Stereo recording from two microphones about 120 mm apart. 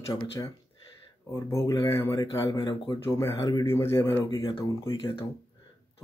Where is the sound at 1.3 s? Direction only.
25° left (ahead or behind).